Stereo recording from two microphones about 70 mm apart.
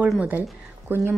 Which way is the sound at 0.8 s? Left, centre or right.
Right.